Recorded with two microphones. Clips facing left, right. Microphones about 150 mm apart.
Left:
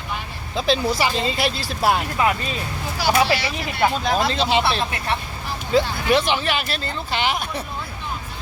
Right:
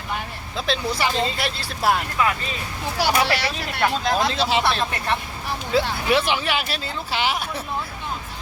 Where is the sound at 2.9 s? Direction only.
70° right (ahead or behind).